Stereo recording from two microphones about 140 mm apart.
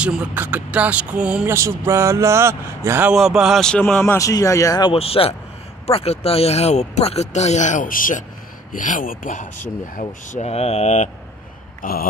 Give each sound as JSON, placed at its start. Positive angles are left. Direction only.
{"t": 0.0, "sound": "speech", "side_deg": -10}
{"t": 3.1, "sound": "speech", "side_deg": -5}
{"t": 4.0, "sound": "speech", "side_deg": 20}
{"t": 4.9, "sound": "speech", "side_deg": 45}
{"t": 11.8, "sound": "a sound", "side_deg": 90}